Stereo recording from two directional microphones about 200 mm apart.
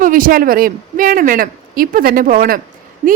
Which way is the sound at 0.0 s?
45° right (ahead or behind).